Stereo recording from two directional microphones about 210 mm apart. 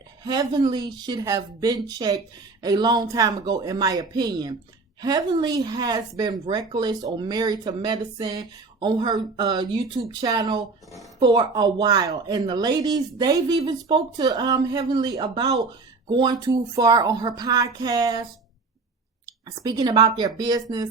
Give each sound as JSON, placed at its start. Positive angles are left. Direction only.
{"t": 0.3, "sound": "a woman's voice", "side_deg": -20}